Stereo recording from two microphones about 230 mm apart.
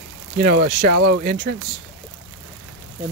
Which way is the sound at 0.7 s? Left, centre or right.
Right.